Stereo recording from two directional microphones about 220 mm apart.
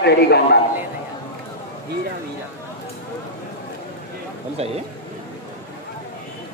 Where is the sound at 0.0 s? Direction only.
50° left (ahead or behind).